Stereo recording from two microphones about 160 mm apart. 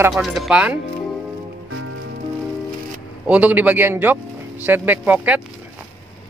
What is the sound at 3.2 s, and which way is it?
Speech, 10° right (ahead or behind).